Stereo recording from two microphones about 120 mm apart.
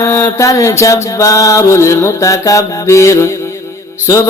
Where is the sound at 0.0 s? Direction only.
20° left (ahead or behind).